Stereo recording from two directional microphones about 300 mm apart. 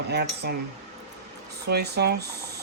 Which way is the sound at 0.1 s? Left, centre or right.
Right.